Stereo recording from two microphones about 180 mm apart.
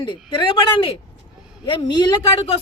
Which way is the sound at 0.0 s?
25° left (ahead or behind).